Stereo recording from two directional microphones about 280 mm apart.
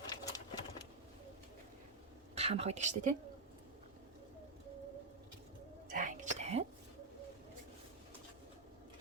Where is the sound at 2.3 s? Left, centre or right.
Right.